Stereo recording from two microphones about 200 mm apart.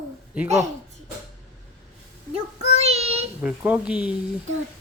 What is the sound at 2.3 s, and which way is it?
Child singing, 30° right (ahead or behind).